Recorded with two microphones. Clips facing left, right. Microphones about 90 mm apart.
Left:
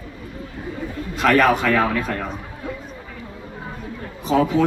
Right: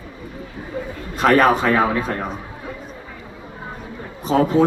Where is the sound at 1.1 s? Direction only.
35° right (ahead or behind).